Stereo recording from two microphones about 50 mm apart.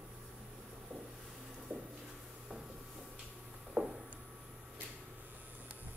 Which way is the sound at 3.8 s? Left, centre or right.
Centre.